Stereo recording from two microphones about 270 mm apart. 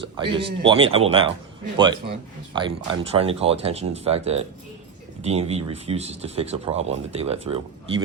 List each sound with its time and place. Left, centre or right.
0.0 s a man's voice: centre